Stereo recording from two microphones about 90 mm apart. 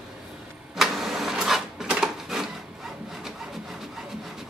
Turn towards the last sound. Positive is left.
turn(degrees=-5)  # may be behind; listen again after turning